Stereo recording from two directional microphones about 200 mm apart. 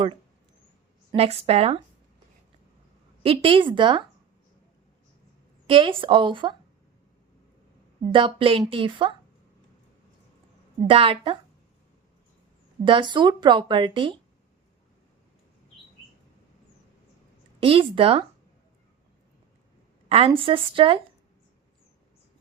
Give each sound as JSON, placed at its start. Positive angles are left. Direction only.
{"t": 1.1, "sound": "speech", "side_deg": -30}
{"t": 3.2, "sound": "speech", "side_deg": -25}
{"t": 5.6, "sound": "speech", "side_deg": -25}
{"t": 8.1, "sound": "speech", "side_deg": -25}
{"t": 10.8, "sound": "speech", "side_deg": -25}
{"t": 12.8, "sound": "speech", "side_deg": -25}
{"t": 17.6, "sound": "speech", "side_deg": -25}
{"t": 20.1, "sound": "speech", "side_deg": -30}